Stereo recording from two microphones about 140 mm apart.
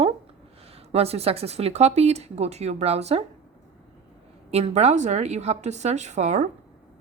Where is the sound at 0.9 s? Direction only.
45° right (ahead or behind).